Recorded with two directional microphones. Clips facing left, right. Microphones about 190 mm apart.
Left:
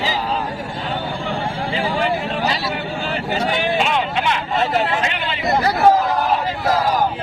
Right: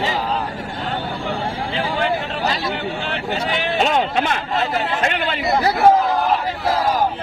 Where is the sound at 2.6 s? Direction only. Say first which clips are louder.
Even; 5° left (ahead or behind).